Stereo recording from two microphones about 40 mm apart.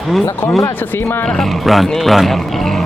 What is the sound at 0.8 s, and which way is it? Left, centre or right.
Speech, left.